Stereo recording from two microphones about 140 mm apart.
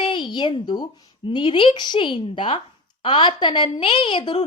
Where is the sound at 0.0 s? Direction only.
35° left (ahead or behind).